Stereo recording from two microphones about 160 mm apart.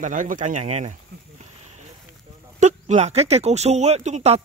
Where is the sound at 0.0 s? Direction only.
55° right (ahead or behind).